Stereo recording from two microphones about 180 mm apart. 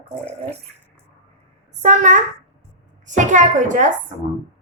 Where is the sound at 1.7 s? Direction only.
40° right (ahead or behind).